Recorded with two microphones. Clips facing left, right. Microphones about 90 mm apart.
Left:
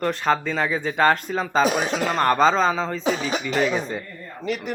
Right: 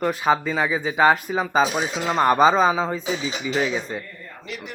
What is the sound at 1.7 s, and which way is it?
Speech, 55° left (ahead or behind).